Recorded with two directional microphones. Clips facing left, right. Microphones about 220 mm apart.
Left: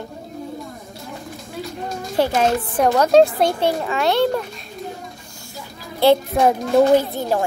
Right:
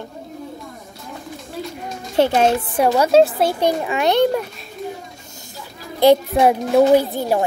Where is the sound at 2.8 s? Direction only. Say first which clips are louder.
Even; 5° right (ahead or behind).